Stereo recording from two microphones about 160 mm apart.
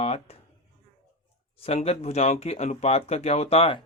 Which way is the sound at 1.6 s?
40° left (ahead or behind).